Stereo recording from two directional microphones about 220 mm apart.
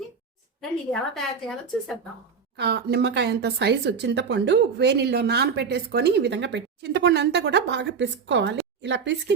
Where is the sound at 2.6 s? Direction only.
50° right (ahead or behind).